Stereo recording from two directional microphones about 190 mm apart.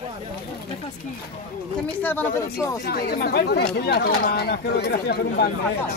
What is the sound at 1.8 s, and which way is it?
Speech, 10° left (ahead or behind).